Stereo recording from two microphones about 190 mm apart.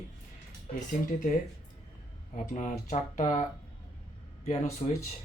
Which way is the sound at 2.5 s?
40° left (ahead or behind).